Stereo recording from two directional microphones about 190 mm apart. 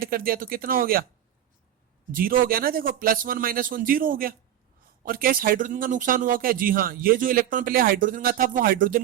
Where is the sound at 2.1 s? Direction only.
50° right (ahead or behind).